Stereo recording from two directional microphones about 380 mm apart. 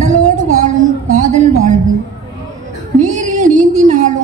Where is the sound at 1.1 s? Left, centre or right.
Centre.